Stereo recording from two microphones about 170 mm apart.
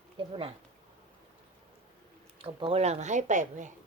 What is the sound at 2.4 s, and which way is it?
A woman's voice, 30° right (ahead or behind).